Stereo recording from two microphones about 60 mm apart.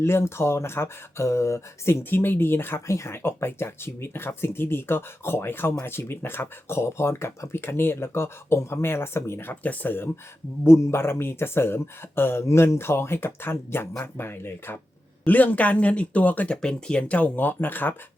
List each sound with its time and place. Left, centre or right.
0.0 s speech: left
2.8 s speech: left
10.6 s speech: left
15.2 s speech: left
16.5 s speech: centre; by 17.9 s left